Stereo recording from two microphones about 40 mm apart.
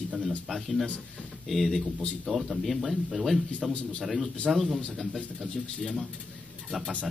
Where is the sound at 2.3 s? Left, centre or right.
Centre.